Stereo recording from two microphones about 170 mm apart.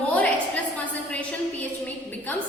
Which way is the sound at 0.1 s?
10° left (ahead or behind).